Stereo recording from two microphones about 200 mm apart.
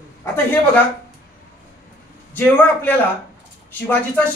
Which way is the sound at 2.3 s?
10° left (ahead or behind).